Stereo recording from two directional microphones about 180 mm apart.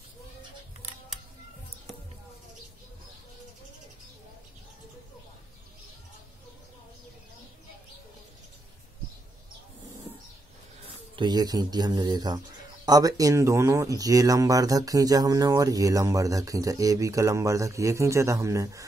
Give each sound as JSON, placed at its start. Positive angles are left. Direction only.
{"t": 11.1, "sound": "speech", "side_deg": -20}